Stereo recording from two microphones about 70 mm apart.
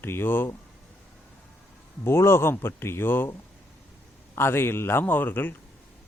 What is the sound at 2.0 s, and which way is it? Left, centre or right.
A man's voice, left.